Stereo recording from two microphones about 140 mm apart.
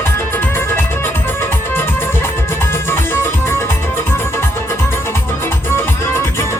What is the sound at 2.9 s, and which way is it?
Music, 15° left (ahead or behind).